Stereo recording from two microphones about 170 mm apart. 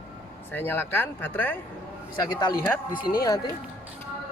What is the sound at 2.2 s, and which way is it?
Speech, 25° left (ahead or behind).